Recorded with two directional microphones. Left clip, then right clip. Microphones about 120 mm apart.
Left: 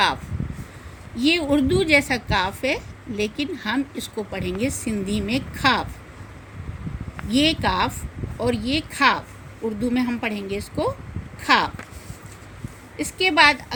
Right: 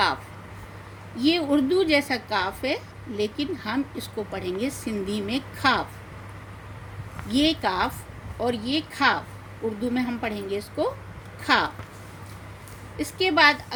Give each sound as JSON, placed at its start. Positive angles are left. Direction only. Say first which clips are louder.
{"t": 1.1, "sound": "a woman's voice", "louder": "left 2 dB", "side_deg": 60}
{"t": 7.3, "sound": "a woman's voice", "louder": "left 3 dB", "side_deg": 55}
{"t": 13.0, "sound": "a woman's voice", "louder": "left 3 dB", "side_deg": 55}